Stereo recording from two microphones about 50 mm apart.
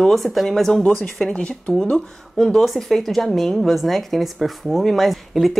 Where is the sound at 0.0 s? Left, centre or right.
Centre.